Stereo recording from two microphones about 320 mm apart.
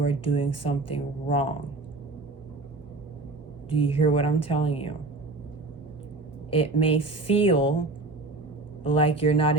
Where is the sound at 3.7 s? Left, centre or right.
Centre.